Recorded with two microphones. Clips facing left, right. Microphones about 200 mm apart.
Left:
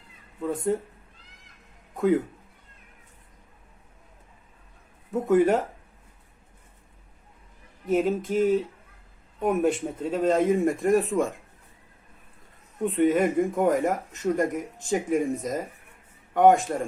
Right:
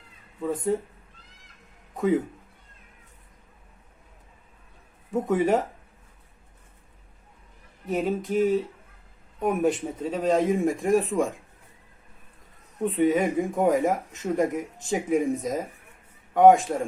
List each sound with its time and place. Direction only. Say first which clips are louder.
0.4 s speech: even; 10° right (ahead or behind)
2.0 s speech: left 1 dB; centre (ahead or behind)
5.1 s speech: left 2 dB; centre (ahead or behind)
7.9 s speech: left 2 dB; centre (ahead or behind)
12.8 s speech: left 1 dB; 5° right (ahead or behind)